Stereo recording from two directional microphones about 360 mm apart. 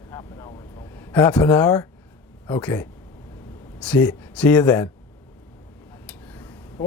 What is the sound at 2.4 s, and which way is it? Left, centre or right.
Speech, centre.